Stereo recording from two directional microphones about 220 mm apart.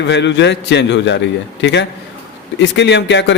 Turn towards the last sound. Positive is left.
turn(degrees=50)  # may be behind; listen again after turning